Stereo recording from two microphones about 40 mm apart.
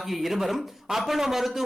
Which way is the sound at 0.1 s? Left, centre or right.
Centre.